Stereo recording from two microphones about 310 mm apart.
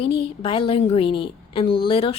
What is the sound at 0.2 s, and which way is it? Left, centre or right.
A woman's voice, centre.